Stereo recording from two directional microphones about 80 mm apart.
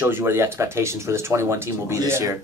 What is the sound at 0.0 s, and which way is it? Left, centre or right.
Speech, right.